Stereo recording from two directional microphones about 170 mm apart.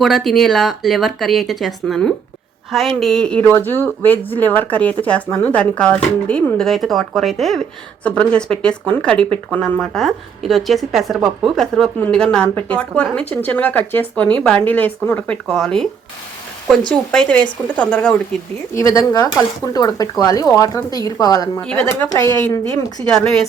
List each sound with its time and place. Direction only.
0.0 s a woman's voice: centre (ahead or behind)
16.9 s a woman's voice: 5° left (ahead or behind)
18.7 s speech: 20° left (ahead or behind)
21.6 s a woman's voice: 5° left (ahead or behind)
23.1 s a woman's voice: 5° left (ahead or behind)